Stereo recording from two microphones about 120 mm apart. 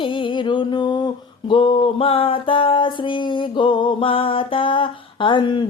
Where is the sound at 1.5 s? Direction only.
45° left (ahead or behind).